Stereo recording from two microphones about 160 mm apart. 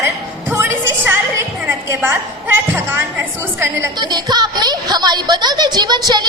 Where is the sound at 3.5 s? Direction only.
15° right (ahead or behind).